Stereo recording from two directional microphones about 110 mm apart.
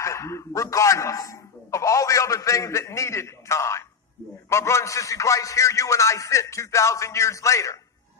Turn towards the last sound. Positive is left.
turn(degrees=30)  # may be behind; listen again after turning